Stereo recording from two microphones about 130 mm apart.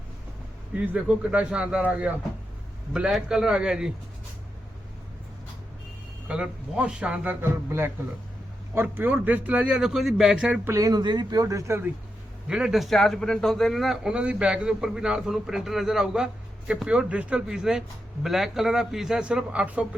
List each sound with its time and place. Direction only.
1.0 s a man's voice: 5° right (ahead or behind)
6.2 s a man's voice: 5° right (ahead or behind)
8.7 s a man's voice: 15° right (ahead or behind)
10.7 s speech: 25° right (ahead or behind)
12.5 s a man's voice: 5° right (ahead or behind)